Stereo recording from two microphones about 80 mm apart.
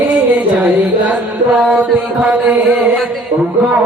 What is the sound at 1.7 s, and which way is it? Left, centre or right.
Mantra, centre.